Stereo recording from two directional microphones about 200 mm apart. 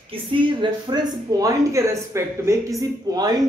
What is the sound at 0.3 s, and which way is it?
Speech, 25° right (ahead or behind).